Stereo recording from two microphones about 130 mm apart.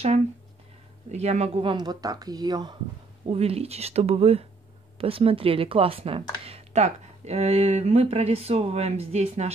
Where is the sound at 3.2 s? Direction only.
50° right (ahead or behind).